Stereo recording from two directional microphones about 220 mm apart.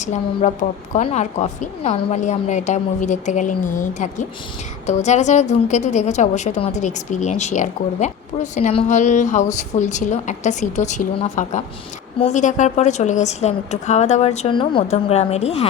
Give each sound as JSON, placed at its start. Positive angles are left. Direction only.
{"t": 0.0, "sound": "a woman's voice", "side_deg": 30}